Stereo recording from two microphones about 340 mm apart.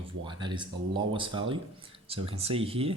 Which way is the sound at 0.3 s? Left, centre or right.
Centre.